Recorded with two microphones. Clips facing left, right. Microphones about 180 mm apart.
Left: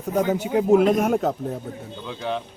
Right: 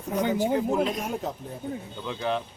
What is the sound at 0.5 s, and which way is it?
Speech, 60° left (ahead or behind).